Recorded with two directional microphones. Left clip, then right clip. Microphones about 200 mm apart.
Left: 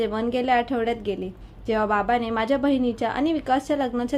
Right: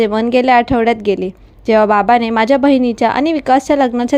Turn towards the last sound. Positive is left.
turn(degrees=-40)  # may be behind; listen again after turning